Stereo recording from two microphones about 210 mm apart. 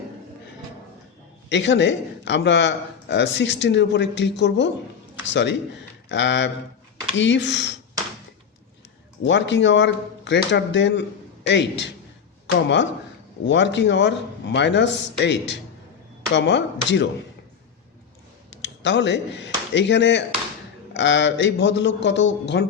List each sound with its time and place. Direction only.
1.5 s speech: 55° left (ahead or behind)
9.2 s speech: 60° left (ahead or behind)
18.5 s speech: 60° left (ahead or behind)